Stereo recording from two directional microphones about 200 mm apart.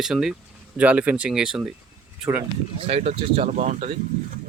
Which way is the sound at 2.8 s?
35° right (ahead or behind).